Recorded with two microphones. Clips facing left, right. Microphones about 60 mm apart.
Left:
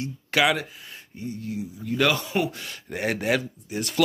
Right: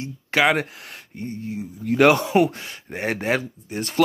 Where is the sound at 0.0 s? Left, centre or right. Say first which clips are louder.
Right 2 dB; right.